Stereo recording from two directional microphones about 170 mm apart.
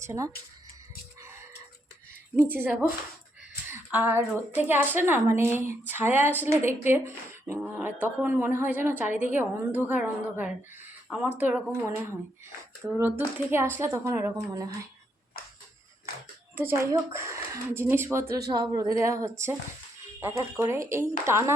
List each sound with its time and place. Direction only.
0.0 s speech: 15° right (ahead or behind)
1.2 s chicken: 15° right (ahead or behind)
2.5 s a woman's voice: 10° right (ahead or behind)
16.6 s a woman's voice: 15° right (ahead or behind)